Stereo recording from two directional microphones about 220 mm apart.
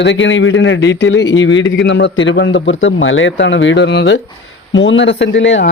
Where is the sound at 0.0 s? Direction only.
55° left (ahead or behind).